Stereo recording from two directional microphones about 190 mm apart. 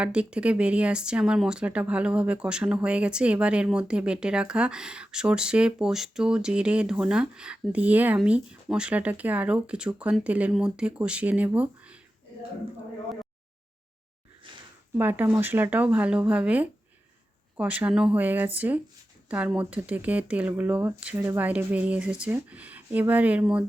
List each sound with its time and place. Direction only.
0.0 s speech: 5° right (ahead or behind)
14.4 s a sound: 25° right (ahead or behind)
14.9 s speech: 10° right (ahead or behind)